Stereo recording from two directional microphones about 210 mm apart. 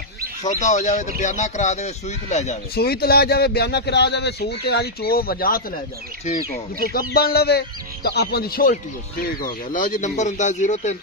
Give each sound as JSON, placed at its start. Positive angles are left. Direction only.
{"t": 0.4, "sound": "speech", "side_deg": 35}
{"t": 2.7, "sound": "speech", "side_deg": 45}